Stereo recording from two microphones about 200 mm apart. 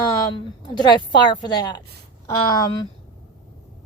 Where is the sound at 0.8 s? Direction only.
20° left (ahead or behind).